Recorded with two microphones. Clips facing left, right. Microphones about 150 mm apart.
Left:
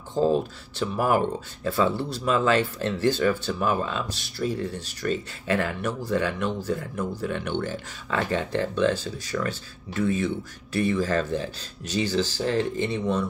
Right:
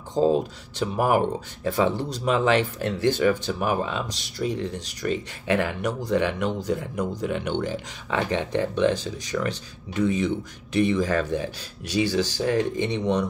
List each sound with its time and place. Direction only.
0.7 s speech: 15° right (ahead or behind)